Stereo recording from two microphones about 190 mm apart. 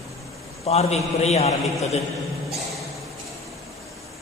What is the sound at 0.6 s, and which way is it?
A man's voice, 35° left (ahead or behind).